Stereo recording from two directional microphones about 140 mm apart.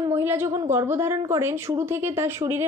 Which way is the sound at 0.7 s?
20° right (ahead or behind).